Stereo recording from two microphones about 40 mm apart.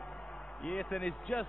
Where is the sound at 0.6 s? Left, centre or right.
Centre.